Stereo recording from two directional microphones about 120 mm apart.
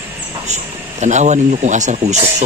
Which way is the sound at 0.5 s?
75° right (ahead or behind).